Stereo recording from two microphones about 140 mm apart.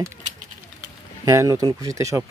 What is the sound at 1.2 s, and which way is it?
Speech, 25° right (ahead or behind).